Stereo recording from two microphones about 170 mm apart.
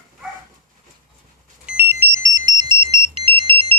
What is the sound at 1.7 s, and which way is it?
Ringtone, 10° right (ahead or behind).